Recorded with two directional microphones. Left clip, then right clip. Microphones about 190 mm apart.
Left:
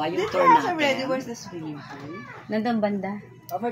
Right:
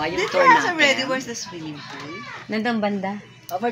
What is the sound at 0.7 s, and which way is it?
Speech, 20° left (ahead or behind).